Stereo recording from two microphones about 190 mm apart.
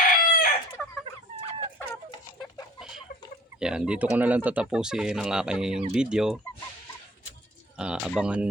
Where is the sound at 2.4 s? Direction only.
20° left (ahead or behind).